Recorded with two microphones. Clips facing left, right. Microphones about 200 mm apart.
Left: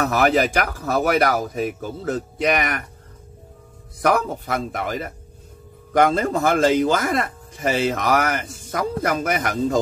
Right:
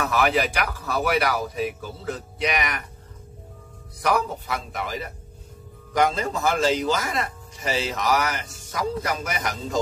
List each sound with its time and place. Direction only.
0.0 s speech: 45° left (ahead or behind)
4.0 s speech: 50° left (ahead or behind)